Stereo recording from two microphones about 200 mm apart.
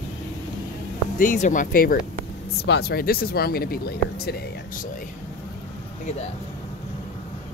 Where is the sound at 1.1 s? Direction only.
40° left (ahead or behind).